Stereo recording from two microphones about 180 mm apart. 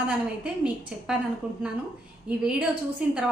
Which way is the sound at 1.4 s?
5° right (ahead or behind).